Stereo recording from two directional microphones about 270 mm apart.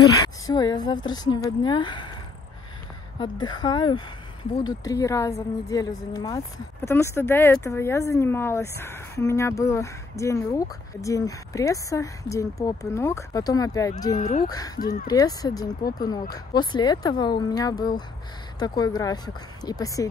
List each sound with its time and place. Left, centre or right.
0.5 s speech: centre
3.2 s speech: centre
14.1 s speech: left
14.5 s speech: centre